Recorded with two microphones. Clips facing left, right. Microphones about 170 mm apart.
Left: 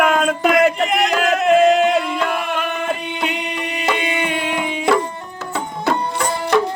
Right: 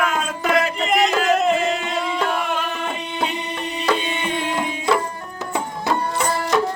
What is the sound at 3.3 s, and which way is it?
Music, 75° left (ahead or behind).